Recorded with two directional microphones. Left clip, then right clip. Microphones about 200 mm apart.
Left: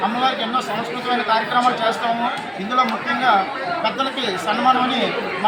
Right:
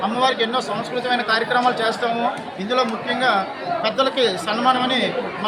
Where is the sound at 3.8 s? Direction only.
25° right (ahead or behind).